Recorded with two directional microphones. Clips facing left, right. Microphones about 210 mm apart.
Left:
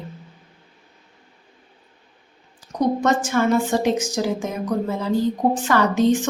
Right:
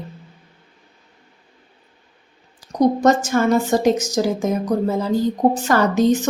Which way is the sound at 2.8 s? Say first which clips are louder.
Right 4 dB; 40° right (ahead or behind).